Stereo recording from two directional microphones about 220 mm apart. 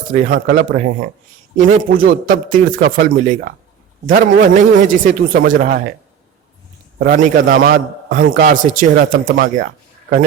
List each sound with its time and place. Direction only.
0.1 s a man's voice: 35° right (ahead or behind)
7.0 s a man's voice: 40° right (ahead or behind)